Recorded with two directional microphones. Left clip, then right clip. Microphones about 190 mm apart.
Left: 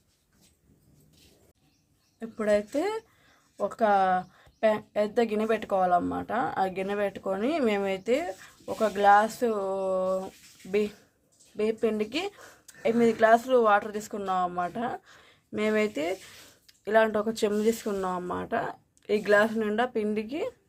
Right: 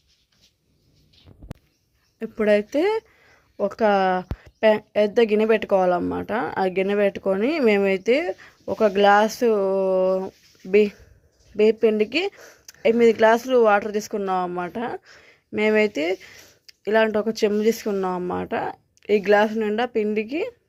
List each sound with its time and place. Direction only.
2.1 s speech: 40° right (ahead or behind)